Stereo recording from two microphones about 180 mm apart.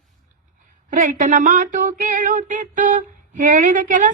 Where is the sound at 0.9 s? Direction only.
45° right (ahead or behind).